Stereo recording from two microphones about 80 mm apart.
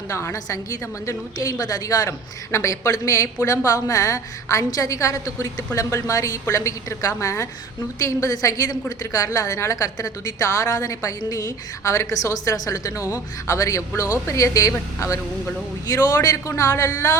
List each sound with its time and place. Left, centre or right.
0.1 s a woman's voice: left
16.5 s a woman's voice: left